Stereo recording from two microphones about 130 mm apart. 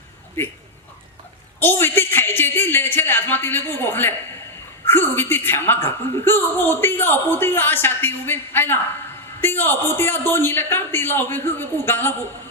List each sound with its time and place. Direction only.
0.4 s a woman's voice: 15° left (ahead or behind)
1.5 s a woman's voice: 15° left (ahead or behind)